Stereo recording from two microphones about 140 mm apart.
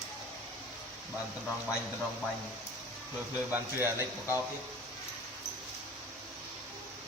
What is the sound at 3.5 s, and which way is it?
Speech, 15° right (ahead or behind).